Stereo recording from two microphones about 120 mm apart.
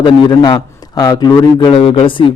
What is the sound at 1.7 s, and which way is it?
Speech, 50° left (ahead or behind).